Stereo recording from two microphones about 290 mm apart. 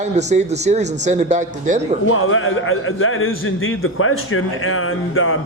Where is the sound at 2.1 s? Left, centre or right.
Left.